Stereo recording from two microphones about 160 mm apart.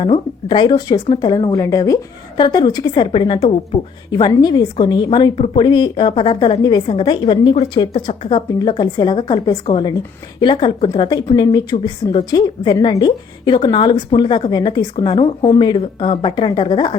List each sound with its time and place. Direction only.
0.0 s a woman's voice: 30° left (ahead or behind)